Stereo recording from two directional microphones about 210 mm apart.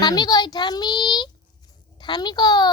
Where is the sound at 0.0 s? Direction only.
20° left (ahead or behind).